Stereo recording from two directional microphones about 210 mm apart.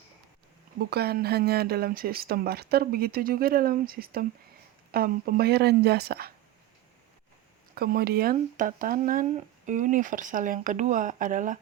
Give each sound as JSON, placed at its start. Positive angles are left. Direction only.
{"t": 0.8, "sound": "speech", "side_deg": -50}
{"t": 7.8, "sound": "speech", "side_deg": -45}